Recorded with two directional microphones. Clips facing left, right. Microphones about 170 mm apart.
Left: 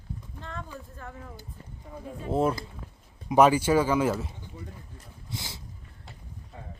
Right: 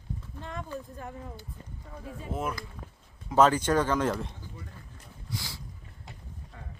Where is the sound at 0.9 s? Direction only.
20° right (ahead or behind).